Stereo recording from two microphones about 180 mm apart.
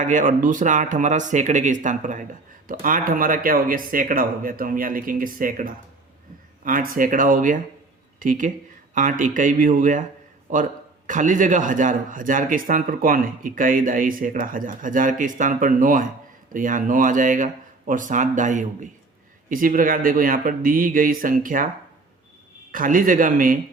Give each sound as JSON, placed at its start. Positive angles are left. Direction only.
{"t": 0.0, "sound": "a man's voice", "side_deg": -45}
{"t": 22.7, "sound": "a man's voice", "side_deg": -50}